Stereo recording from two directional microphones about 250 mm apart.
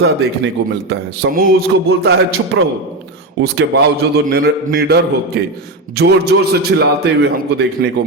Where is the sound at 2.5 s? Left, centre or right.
Right.